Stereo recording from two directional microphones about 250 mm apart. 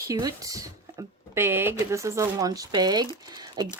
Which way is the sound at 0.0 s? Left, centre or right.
Centre.